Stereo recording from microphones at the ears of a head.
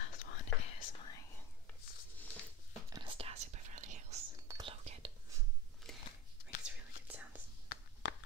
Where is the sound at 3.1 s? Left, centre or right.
Right.